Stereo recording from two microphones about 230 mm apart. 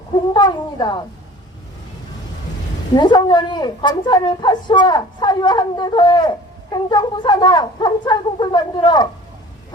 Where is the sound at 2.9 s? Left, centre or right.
Centre.